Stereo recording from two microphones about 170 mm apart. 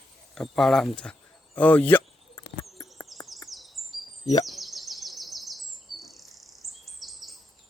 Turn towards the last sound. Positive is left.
turn(degrees=0)  # may be behind; listen again after turning